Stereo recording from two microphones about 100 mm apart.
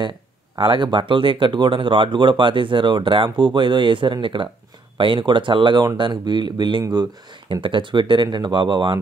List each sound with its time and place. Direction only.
0.6 s speech: 50° right (ahead or behind)
7.6 s speech: 55° right (ahead or behind)